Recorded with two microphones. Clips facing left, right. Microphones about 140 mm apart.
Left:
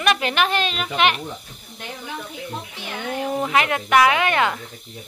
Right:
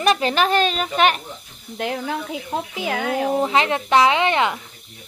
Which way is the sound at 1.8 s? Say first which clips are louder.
Right 8 dB; 90° right.